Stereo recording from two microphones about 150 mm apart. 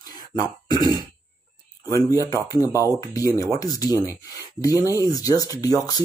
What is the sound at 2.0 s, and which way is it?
Speech, 20° left (ahead or behind).